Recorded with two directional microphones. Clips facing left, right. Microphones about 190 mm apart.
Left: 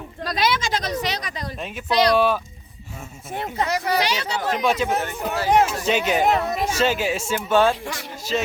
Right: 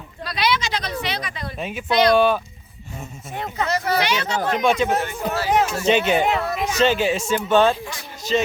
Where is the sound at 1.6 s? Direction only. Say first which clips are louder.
Right 3 dB; centre (ahead or behind).